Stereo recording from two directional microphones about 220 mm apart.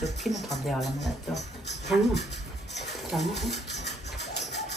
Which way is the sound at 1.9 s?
Centre (ahead or behind).